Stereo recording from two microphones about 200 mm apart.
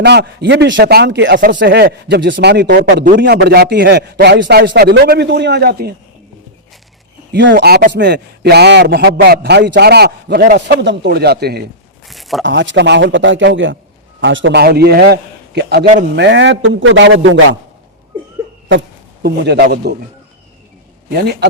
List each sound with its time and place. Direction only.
0.0 s a man's voice: 55° right (ahead or behind)
7.3 s a man's voice: 60° right (ahead or behind)
12.0 s a sound: centre (ahead or behind)
12.4 s a man's voice: 65° right (ahead or behind)
19.2 s a man's voice: 55° right (ahead or behind)
21.1 s a man's voice: 50° right (ahead or behind)